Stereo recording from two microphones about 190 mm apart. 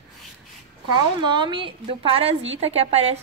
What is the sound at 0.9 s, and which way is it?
A woman's voice, 25° right (ahead or behind).